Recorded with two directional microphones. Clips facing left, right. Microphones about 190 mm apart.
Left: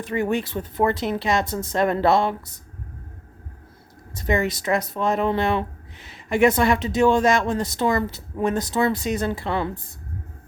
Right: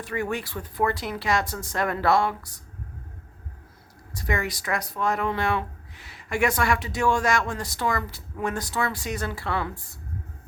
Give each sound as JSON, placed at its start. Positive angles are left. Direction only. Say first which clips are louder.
{"t": 0.0, "sound": "speech", "louder": "left 5 dB", "side_deg": 20}
{"t": 4.1, "sound": "speech", "louder": "left 6 dB", "side_deg": 25}